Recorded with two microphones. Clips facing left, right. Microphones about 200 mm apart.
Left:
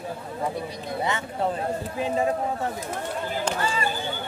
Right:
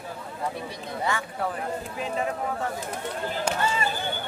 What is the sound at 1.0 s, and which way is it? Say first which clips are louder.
A man's voice: left 2 dB; 25° left (ahead or behind).